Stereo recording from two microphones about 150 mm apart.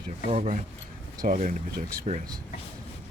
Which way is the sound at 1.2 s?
65° right (ahead or behind).